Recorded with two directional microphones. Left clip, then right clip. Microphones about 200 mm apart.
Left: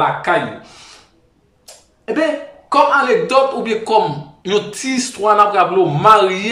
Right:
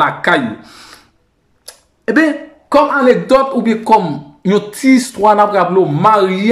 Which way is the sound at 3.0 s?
45° right (ahead or behind).